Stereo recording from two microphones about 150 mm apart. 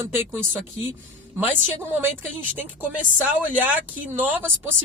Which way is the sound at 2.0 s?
10° right (ahead or behind).